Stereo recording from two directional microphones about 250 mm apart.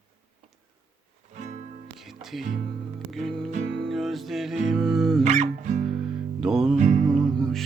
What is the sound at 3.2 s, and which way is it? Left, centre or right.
Music, centre.